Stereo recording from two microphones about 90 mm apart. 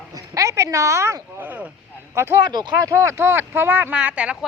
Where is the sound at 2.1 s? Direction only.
30° right (ahead or behind).